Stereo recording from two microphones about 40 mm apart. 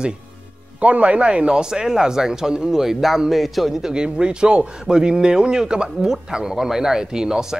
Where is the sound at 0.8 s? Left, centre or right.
Right.